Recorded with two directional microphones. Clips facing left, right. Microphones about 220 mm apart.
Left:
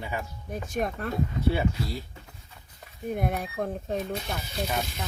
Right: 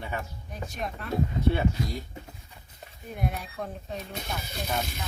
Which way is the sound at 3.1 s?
50° left (ahead or behind).